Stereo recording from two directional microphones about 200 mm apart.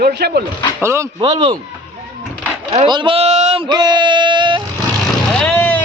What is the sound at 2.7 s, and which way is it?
Speech, 25° right (ahead or behind).